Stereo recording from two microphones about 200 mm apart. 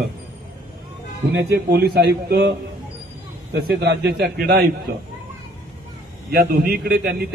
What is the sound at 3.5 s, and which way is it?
A man's voice, 55° right (ahead or behind).